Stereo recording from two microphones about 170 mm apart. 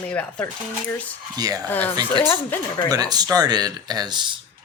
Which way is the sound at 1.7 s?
10° left (ahead or behind).